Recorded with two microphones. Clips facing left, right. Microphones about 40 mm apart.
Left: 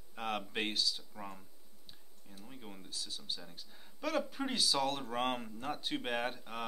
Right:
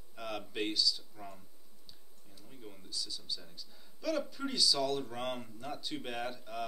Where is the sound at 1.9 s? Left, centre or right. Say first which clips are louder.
Left 3 dB; left.